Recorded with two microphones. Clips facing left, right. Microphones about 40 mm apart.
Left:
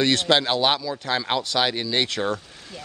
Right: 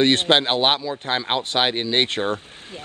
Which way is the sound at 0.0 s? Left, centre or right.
Right.